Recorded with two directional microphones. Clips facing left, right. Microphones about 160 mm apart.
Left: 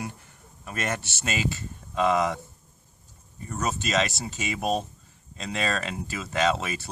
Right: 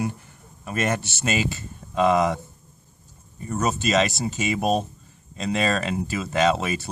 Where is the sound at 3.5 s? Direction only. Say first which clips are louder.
Right 5 dB; 25° right (ahead or behind).